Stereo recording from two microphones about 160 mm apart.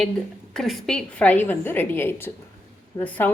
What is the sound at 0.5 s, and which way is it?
A woman's voice, centre (ahead or behind).